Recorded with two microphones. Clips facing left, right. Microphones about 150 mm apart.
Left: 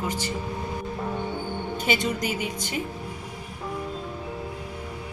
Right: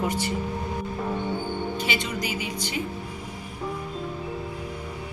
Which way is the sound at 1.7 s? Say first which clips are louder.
Left 3 dB; 45° left (ahead or behind).